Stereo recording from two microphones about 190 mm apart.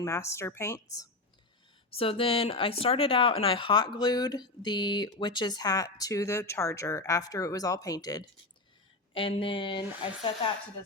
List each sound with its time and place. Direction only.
0.0 s speech: 15° left (ahead or behind)
1.9 s speech: 30° left (ahead or behind)